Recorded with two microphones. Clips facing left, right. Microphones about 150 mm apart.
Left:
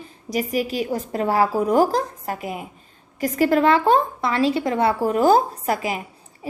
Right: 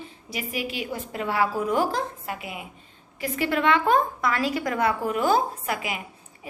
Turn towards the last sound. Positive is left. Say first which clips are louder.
# left 6 dB
turn(degrees=35)  # may be behind; listen again after turning